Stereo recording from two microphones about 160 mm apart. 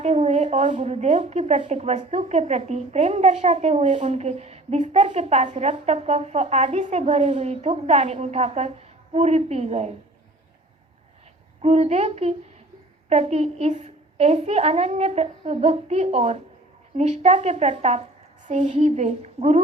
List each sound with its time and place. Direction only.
0.0 s a woman's voice: 40° right (ahead or behind)
11.6 s a woman's voice: 40° right (ahead or behind)